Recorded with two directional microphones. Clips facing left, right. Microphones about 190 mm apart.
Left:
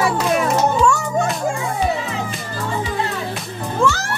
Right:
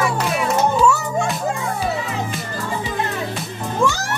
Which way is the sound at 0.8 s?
5° right (ahead or behind).